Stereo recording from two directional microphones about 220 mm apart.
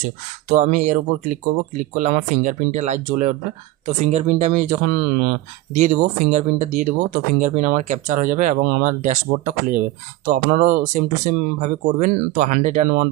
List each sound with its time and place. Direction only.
0.4 s speech: 35° right (ahead or behind)